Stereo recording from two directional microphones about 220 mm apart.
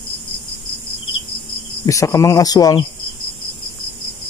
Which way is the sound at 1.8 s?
15° left (ahead or behind).